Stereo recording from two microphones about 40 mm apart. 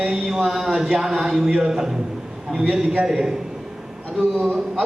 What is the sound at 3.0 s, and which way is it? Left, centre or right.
Speech, centre.